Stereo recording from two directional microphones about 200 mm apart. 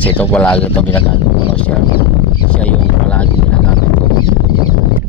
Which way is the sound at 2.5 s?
5° left (ahead or behind).